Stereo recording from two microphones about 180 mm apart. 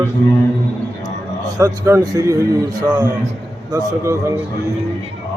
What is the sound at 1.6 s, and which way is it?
Mantra, 20° right (ahead or behind).